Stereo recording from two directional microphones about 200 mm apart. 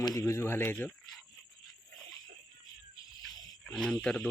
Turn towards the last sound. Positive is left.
turn(degrees=5)  # may be behind; listen again after turning